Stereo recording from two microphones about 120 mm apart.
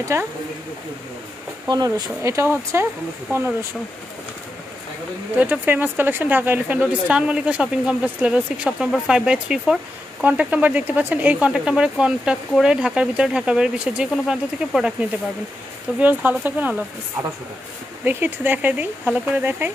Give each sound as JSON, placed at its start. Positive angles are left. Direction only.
{"t": 0.0, "sound": "speech", "side_deg": -25}
{"t": 1.7, "sound": "speech", "side_deg": -35}
{"t": 5.4, "sound": "speech", "side_deg": -15}
{"t": 18.0, "sound": "speech", "side_deg": -15}